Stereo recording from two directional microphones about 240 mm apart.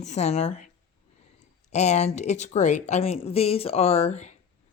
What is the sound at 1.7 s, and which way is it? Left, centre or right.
Speech, left.